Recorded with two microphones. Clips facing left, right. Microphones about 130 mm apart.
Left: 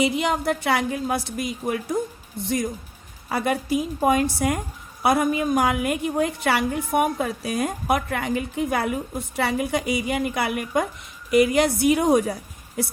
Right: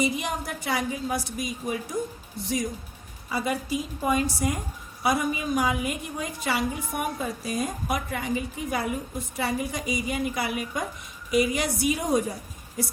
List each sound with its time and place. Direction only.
0.0 s a woman's voice: 65° left (ahead or behind)
3.2 s a woman's voice: 60° left (ahead or behind)